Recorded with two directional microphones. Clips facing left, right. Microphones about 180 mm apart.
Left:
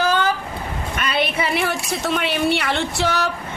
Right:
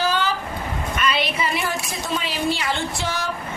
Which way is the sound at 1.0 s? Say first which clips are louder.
Left 2 dB; 60° left (ahead or behind).